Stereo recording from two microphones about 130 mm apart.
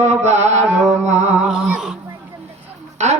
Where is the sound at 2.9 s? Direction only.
60° right (ahead or behind).